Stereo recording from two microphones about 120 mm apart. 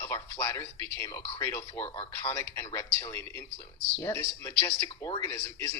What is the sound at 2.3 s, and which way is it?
A man's voice, 25° left (ahead or behind).